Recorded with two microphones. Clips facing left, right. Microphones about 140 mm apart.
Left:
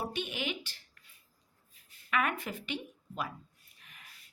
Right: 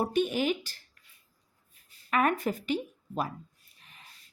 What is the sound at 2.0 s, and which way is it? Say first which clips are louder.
A woman's voice: right 6 dB; 40° right (ahead or behind).